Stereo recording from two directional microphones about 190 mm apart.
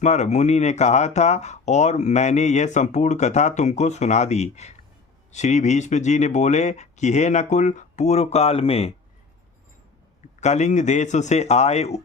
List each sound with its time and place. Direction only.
0.0 s speech: 35° left (ahead or behind)
10.4 s speech: 40° left (ahead or behind)